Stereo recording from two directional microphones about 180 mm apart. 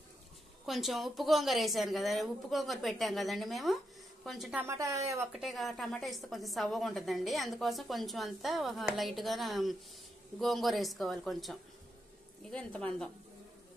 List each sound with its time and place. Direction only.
0.7 s a woman's voice: centre (ahead or behind)
4.6 s speech: 15° right (ahead or behind)
5.3 s a woman's voice: centre (ahead or behind)